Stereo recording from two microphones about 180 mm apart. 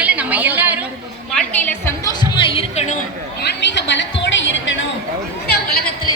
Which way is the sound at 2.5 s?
35° left (ahead or behind).